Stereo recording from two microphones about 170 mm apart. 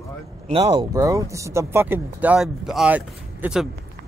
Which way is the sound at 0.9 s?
20° right (ahead or behind).